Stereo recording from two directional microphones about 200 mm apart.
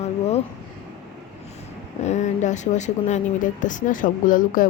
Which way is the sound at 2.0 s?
35° left (ahead or behind).